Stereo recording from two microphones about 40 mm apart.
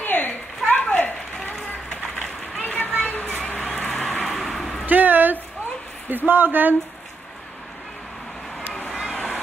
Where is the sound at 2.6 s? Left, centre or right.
Left.